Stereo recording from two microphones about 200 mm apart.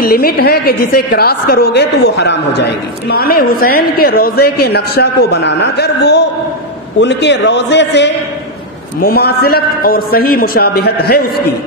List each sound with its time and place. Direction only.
0.0 s a woman's voice: 50° left (ahead or behind)